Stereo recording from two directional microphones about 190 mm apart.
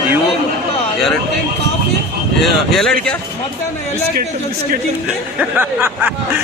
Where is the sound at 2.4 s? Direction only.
Centre (ahead or behind).